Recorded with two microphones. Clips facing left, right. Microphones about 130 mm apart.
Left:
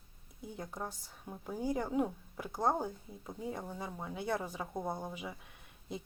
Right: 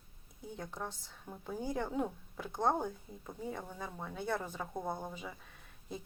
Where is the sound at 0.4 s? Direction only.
10° left (ahead or behind).